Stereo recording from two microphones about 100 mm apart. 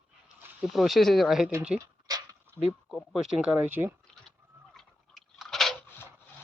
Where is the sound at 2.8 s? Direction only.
5° right (ahead or behind).